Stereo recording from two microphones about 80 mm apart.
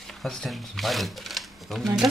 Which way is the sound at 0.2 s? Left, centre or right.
Centre.